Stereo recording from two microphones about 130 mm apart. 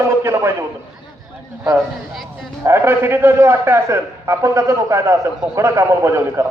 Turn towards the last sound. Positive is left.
turn(degrees=-20)  # may be behind; listen again after turning